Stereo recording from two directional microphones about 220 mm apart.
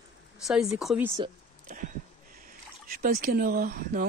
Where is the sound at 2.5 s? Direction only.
40° right (ahead or behind).